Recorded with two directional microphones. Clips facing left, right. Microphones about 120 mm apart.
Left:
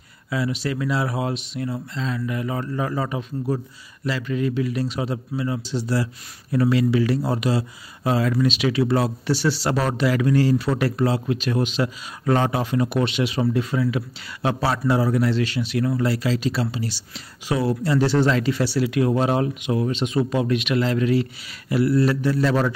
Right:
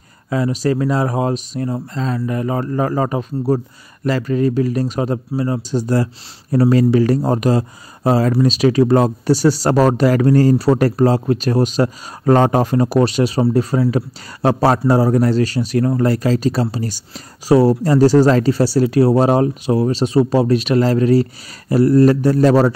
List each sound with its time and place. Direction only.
0.3 s speech: 40° right (ahead or behind)